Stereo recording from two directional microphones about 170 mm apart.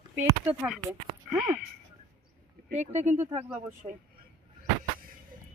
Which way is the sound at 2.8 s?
45° right (ahead or behind).